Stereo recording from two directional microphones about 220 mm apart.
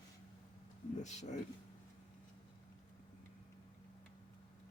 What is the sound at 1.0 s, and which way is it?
Speech, 30° left (ahead or behind).